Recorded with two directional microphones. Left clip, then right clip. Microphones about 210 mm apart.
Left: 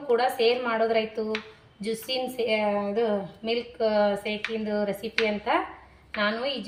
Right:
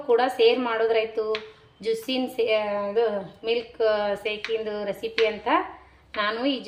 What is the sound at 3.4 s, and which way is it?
A woman's voice, 50° right (ahead or behind).